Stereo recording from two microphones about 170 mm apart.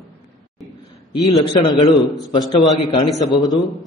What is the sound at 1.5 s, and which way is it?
Speech, 30° left (ahead or behind).